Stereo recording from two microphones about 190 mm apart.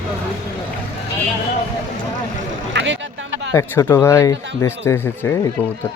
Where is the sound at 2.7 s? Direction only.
75° right (ahead or behind).